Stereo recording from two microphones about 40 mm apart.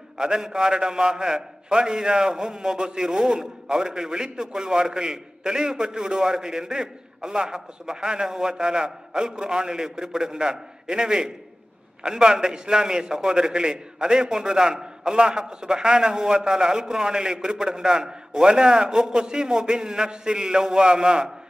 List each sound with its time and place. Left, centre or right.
0.2 s a man's voice: centre